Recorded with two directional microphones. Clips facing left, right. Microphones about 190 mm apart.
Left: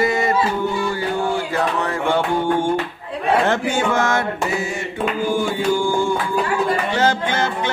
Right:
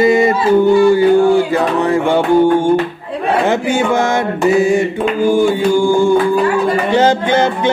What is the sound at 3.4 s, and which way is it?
Mantra, 10° right (ahead or behind).